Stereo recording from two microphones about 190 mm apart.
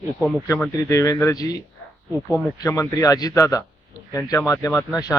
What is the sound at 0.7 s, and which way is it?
Speech, 15° left (ahead or behind).